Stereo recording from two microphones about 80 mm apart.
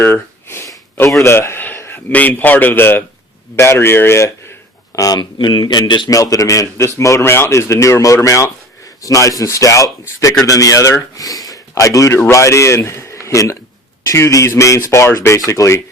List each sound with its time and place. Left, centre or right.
0.0 s a sound: left
1.2 s a man's voice: left
4.9 s speech: left
5.2 s speech: left
6.1 s a man's voice: left